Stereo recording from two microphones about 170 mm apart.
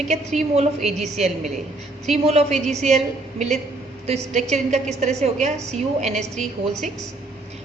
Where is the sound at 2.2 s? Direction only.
40° right (ahead or behind).